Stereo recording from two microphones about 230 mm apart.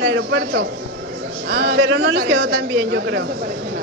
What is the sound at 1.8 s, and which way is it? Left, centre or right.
A woman's voice, right.